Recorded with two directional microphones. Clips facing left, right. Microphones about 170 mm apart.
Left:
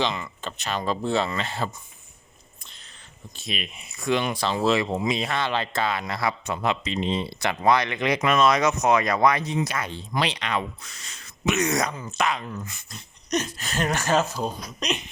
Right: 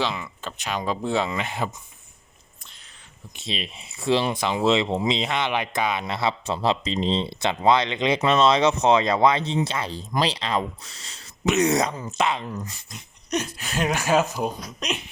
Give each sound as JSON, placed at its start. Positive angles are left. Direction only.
{"t": 0.0, "sound": "speech", "side_deg": -5}
{"t": 3.3, "sound": "speech", "side_deg": -25}
{"t": 4.4, "sound": "speech", "side_deg": -15}
{"t": 12.5, "sound": "speech", "side_deg": -35}
{"t": 12.9, "sound": "speech", "side_deg": -10}